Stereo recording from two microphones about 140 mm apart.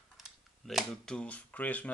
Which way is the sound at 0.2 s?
Centre (ahead or behind).